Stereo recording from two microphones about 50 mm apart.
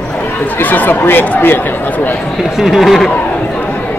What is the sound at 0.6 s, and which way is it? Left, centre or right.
Speech, left.